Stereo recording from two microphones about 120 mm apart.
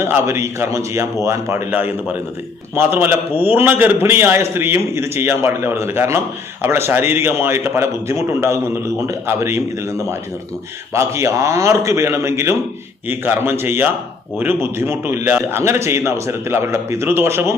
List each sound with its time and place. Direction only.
0.0 s a man's voice: 20° right (ahead or behind)
10.9 s a man's voice: 25° right (ahead or behind)